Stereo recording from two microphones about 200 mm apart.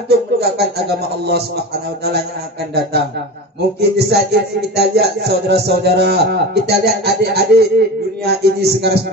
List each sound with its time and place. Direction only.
0.1 s music: 55° right (ahead or behind)
3.8 s music: 55° right (ahead or behind)